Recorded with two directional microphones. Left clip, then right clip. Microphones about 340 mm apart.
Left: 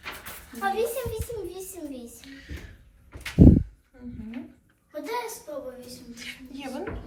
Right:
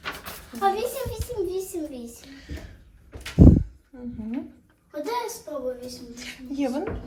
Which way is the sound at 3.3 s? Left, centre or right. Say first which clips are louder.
Even; left.